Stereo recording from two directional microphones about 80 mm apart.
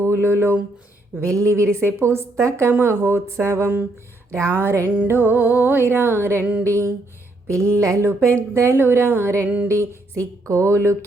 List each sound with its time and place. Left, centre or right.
0.0 s speech: right
1.2 s a woman's voice: right
5.0 s music: right
6.6 s a woman's voice: right